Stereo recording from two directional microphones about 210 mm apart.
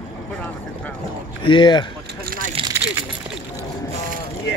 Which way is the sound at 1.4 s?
20° left (ahead or behind).